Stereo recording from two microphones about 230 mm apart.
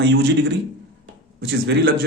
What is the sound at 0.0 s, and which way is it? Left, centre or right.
Speech, right.